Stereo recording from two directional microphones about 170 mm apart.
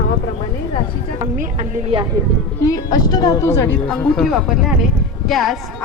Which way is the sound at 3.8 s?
5° left (ahead or behind).